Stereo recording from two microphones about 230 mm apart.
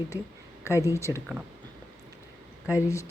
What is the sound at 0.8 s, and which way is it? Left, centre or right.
Speech, centre.